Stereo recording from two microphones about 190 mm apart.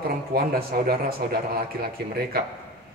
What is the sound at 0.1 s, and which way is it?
A man's voice, 50° right (ahead or behind).